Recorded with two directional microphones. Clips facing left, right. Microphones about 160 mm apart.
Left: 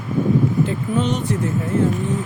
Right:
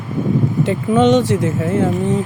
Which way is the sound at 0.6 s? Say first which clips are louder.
Right 7 dB; 85° right.